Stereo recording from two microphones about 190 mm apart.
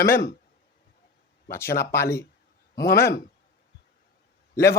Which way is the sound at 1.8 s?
15° left (ahead or behind).